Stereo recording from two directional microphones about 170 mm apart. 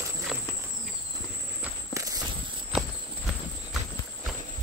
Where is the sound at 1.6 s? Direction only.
20° right (ahead or behind).